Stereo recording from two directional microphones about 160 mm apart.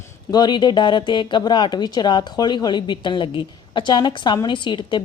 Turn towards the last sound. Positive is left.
turn(degrees=30)  # may be behind; listen again after turning